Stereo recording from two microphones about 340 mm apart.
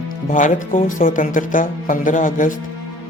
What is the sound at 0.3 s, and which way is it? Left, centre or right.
Speech, left.